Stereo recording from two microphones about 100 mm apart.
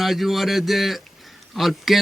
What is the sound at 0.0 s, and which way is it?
A man's voice, centre (ahead or behind).